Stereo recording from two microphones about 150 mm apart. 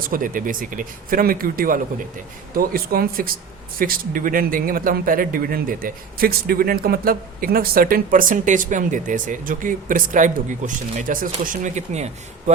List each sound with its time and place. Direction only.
0.0 s a man's voice: 65° right (ahead or behind)
2.6 s a man's voice: 80° right
11.6 s speech: 50° right (ahead or behind)